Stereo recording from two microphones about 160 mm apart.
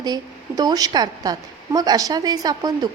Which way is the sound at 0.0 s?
25° right (ahead or behind).